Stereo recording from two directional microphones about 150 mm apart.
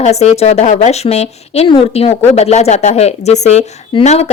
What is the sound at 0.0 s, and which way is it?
A woman's voice, 45° left (ahead or behind).